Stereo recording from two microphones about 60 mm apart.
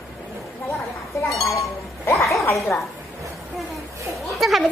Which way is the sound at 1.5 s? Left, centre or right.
Left.